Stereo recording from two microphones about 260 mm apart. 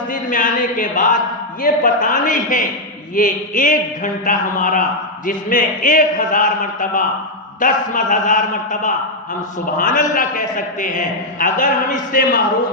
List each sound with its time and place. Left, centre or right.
0.1 s a man's voice: left